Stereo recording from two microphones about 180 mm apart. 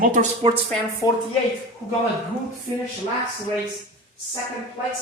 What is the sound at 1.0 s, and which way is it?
Speech, 20° left (ahead or behind).